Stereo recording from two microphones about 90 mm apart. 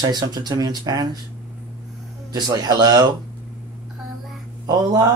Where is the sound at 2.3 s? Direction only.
50° right (ahead or behind).